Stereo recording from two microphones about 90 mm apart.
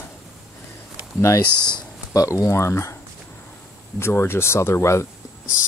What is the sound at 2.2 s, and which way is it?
Speech, 35° left (ahead or behind).